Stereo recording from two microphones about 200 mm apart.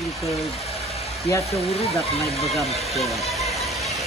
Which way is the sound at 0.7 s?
30° left (ahead or behind).